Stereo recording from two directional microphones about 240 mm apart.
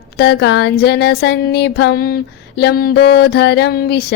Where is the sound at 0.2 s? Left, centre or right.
Left.